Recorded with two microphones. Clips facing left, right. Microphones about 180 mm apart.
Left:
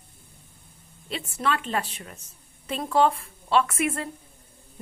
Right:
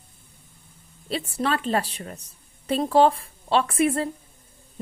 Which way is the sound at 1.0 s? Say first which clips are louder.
Right 2 dB; 35° right (ahead or behind).